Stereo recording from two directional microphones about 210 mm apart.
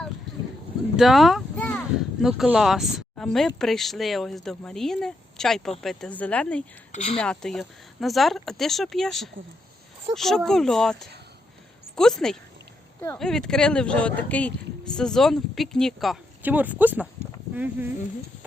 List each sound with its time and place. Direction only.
0.9 s a sound: centre (ahead or behind)
2.2 s speech: centre (ahead or behind)
6.9 s speech: 30° left (ahead or behind)
7.2 s speech: 5° left (ahead or behind)